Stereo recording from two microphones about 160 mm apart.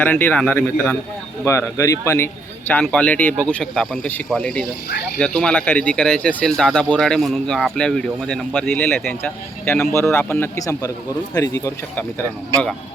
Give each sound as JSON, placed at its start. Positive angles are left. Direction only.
{"t": 0.0, "sound": "speech", "side_deg": 10}
{"t": 1.5, "sound": "speech", "side_deg": 15}